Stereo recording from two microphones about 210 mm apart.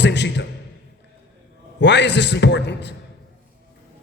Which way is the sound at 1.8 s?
55° left (ahead or behind).